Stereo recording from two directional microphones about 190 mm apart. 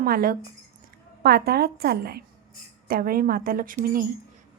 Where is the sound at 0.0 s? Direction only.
50° right (ahead or behind).